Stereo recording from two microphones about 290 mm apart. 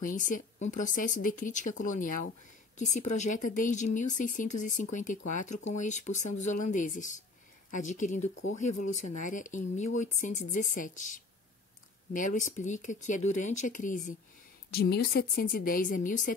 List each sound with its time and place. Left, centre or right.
0.0 s speech: left
12.4 s speech: left